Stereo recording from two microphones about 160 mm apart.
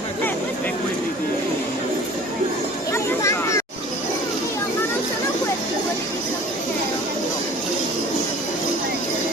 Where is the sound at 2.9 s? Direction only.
20° left (ahead or behind).